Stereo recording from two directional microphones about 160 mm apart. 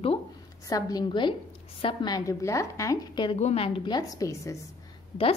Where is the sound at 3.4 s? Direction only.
45° left (ahead or behind).